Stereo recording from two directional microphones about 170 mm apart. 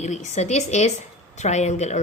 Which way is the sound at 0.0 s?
40° left (ahead or behind).